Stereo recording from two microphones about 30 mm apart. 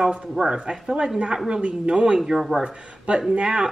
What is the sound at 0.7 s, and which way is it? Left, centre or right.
Speech, right.